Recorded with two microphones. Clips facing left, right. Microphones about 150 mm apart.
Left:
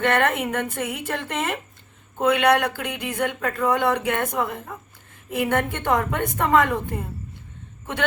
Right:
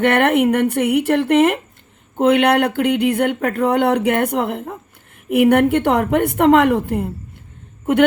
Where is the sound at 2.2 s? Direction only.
60° right (ahead or behind).